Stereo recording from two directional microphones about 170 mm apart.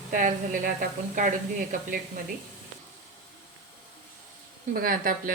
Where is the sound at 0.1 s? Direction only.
50° right (ahead or behind).